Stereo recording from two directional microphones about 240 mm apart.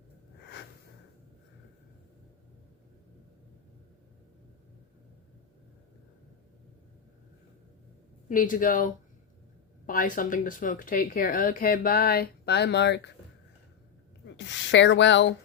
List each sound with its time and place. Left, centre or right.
8.3 s a woman's voice: left
14.3 s speech: left